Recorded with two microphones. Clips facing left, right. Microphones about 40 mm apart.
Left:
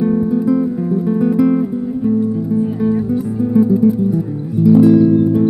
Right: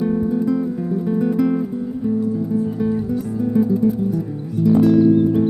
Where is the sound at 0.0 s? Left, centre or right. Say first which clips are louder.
Left 4 dB; centre.